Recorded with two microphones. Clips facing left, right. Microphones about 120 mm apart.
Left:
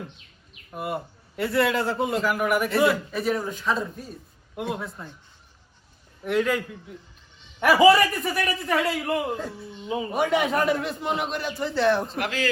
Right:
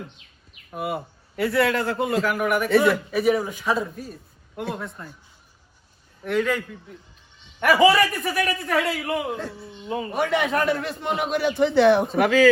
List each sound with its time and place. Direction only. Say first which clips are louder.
0.7 s a man's voice: right 2 dB; centre (ahead or behind)
6.2 s a man's voice: even; 5° left (ahead or behind)
7.6 s a man's voice: left 1 dB; centre (ahead or behind)
11.4 s a man's voice: right 7 dB; 65° right (ahead or behind)